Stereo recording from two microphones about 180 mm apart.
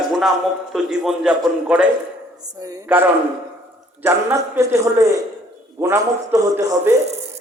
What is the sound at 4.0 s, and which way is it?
A man's voice, 15° right (ahead or behind).